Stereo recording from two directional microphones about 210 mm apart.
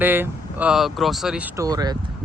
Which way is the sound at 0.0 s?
10° right (ahead or behind).